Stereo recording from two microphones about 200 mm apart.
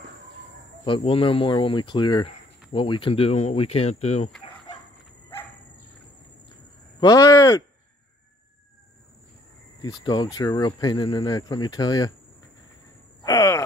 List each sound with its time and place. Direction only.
0.8 s speech: 25° left (ahead or behind)
7.0 s speech: 15° left (ahead or behind)
10.0 s speech: 20° left (ahead or behind)
13.2 s groan: 15° left (ahead or behind)